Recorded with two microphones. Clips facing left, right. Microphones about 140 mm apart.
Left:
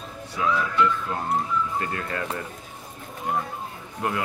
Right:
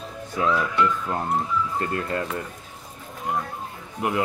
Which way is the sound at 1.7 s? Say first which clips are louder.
Right 3 dB; 25° right (ahead or behind).